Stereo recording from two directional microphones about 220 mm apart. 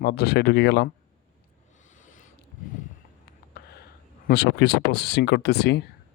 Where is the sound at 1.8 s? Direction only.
35° left (ahead or behind).